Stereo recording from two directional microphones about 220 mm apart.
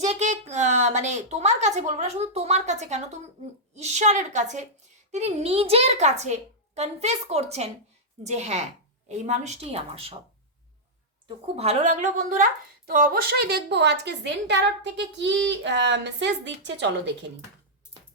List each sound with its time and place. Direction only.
0.0 s a woman's voice: 30° right (ahead or behind)
11.4 s a woman's voice: 30° right (ahead or behind); by 16.9 s 55° right (ahead or behind)